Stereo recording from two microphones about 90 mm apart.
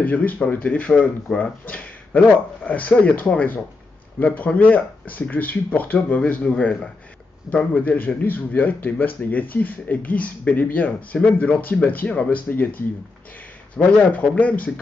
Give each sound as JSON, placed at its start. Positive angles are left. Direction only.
{"t": 0.0, "sound": "speech", "side_deg": 20}